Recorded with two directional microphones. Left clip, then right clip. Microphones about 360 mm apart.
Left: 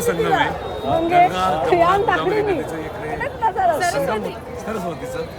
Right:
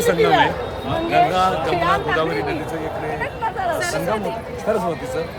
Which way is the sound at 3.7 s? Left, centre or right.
Centre.